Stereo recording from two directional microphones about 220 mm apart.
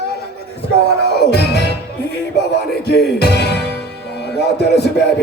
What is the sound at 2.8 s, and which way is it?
Music, 45° left (ahead or behind).